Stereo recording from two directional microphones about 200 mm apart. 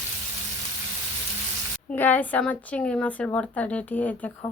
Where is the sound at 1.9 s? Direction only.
10° left (ahead or behind).